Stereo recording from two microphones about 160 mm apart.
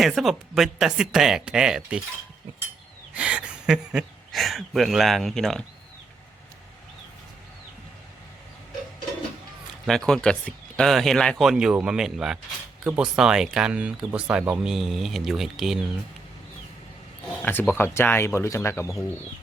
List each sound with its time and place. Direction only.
0.0 s speech: centre (ahead or behind)
3.2 s speech: 5° right (ahead or behind)
9.8 s speech: 5° left (ahead or behind)
17.4 s speech: 10° left (ahead or behind)